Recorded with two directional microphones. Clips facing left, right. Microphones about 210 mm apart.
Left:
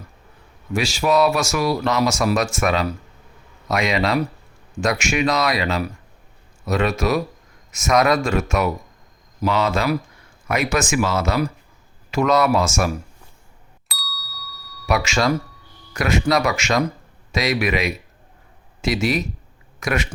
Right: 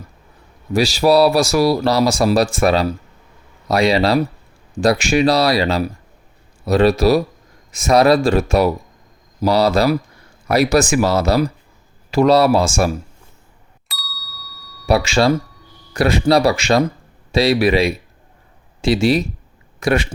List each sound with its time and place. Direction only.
0.7 s speech: 35° right (ahead or behind)
13.8 s ding: centre (ahead or behind)
14.8 s speech: 30° right (ahead or behind)